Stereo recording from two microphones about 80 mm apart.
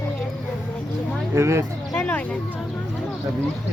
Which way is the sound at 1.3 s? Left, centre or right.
Right.